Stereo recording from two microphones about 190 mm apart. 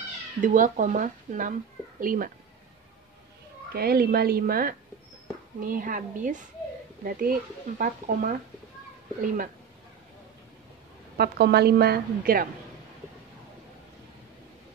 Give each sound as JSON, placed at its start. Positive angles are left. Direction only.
{"t": 0.4, "sound": "speech", "side_deg": -40}
{"t": 3.7, "sound": "speech", "side_deg": -55}
{"t": 11.1, "sound": "a woman's voice", "side_deg": -60}